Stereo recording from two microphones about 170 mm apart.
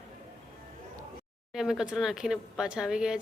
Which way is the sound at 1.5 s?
5° right (ahead or behind).